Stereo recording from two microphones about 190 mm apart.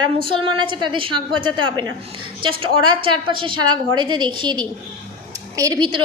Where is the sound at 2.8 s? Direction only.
25° right (ahead or behind).